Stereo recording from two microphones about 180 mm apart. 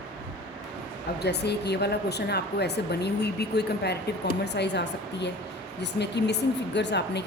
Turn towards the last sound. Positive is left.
turn(degrees=70)  # may be behind; listen again after turning